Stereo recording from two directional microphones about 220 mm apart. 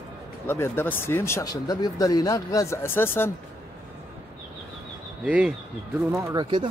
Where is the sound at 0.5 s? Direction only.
10° left (ahead or behind).